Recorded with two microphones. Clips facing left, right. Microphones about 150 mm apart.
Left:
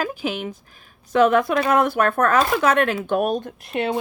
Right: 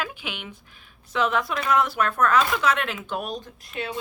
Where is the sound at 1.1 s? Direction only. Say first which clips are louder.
Left 8 dB; 50° left (ahead or behind).